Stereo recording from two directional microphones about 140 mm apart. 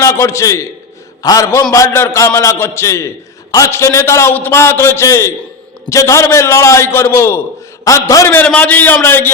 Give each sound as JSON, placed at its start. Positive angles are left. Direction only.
{"t": 0.0, "sound": "a man's voice", "side_deg": 20}